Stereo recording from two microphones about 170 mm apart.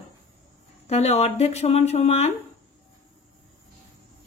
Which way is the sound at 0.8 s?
40° left (ahead or behind).